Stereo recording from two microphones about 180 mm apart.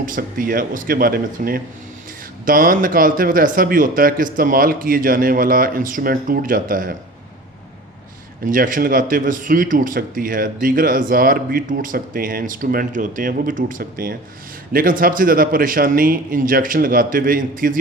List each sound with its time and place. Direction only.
0.0 s speech: 50° right (ahead or behind)
8.4 s speech: 50° right (ahead or behind)